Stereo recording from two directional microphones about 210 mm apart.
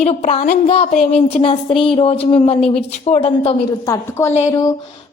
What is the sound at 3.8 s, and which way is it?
A woman's voice, 15° left (ahead or behind).